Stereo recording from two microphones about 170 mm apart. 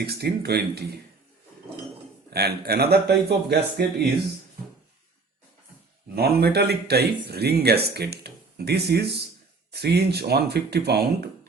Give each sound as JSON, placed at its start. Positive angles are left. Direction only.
{"t": 0.0, "sound": "speech", "side_deg": -70}
{"t": 2.3, "sound": "speech", "side_deg": -70}
{"t": 6.1, "sound": "speech", "side_deg": -65}